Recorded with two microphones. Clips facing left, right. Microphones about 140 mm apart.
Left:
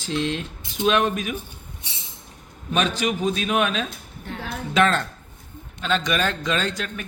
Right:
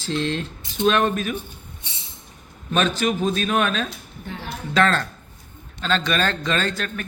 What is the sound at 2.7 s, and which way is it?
A man's voice, 15° left (ahead or behind).